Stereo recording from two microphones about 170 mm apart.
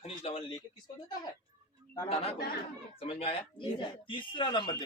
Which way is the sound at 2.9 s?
35° left (ahead or behind).